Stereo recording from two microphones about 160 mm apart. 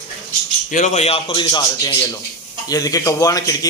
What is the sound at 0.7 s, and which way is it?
Speech, 45° left (ahead or behind).